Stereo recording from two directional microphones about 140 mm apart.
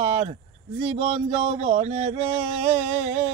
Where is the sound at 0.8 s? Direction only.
40° right (ahead or behind).